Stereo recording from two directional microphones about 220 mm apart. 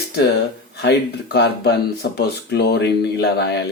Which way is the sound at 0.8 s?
50° left (ahead or behind).